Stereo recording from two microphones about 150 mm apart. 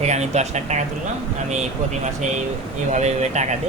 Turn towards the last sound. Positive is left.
turn(degrees=-50)  # may be behind; listen again after turning